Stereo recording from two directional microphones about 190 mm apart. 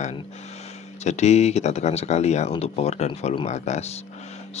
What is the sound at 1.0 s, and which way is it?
Speech, 35° left (ahead or behind).